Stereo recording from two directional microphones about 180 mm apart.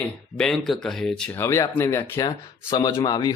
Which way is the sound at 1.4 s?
15° left (ahead or behind).